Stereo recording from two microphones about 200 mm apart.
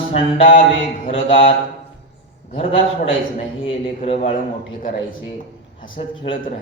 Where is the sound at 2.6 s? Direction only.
30° left (ahead or behind).